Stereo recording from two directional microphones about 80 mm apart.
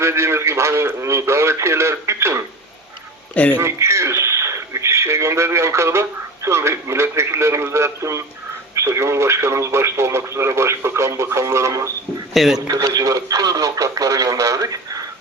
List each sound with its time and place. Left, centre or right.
0.0 s speech: right
3.3 s speech: centre
3.6 s speech: right
12.3 s speech: centre
12.5 s speech: right